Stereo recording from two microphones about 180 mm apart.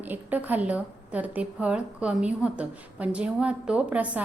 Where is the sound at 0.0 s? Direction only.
10° right (ahead or behind).